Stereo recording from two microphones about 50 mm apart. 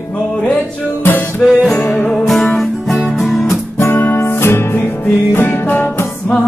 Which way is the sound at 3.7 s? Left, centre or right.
Left.